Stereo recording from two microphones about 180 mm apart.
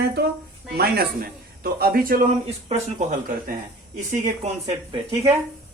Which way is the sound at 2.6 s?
40° right (ahead or behind).